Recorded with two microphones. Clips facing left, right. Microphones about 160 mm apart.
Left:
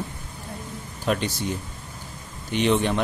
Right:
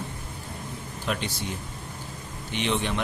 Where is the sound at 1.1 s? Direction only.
40° left (ahead or behind).